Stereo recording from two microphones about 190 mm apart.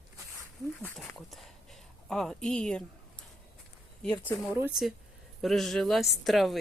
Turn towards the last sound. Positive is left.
turn(degrees=0)  # may be behind; listen again after turning